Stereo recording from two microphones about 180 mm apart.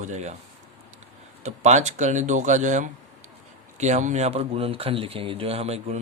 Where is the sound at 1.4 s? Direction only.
40° right (ahead or behind).